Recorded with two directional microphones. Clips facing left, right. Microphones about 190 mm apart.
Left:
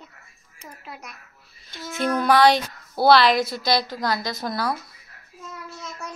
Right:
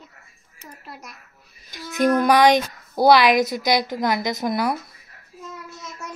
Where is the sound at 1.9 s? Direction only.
15° right (ahead or behind).